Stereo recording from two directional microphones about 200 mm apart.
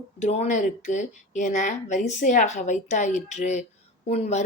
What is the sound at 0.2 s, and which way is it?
Speech, 35° left (ahead or behind).